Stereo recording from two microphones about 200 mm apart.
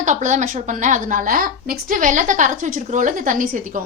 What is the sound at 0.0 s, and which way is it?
A woman's voice, 35° right (ahead or behind).